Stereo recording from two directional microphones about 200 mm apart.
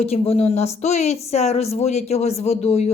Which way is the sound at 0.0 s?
30° left (ahead or behind).